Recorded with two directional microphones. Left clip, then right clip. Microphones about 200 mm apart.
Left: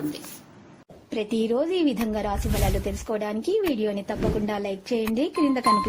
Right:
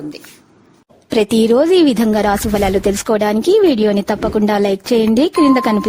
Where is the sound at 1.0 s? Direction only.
65° right (ahead or behind).